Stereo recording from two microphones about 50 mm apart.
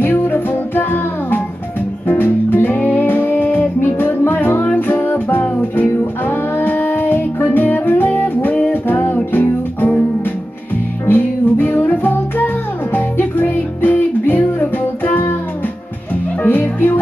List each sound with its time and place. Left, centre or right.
0.0 s music: left
3.8 s music: left
11.1 s music: left
16.4 s music: left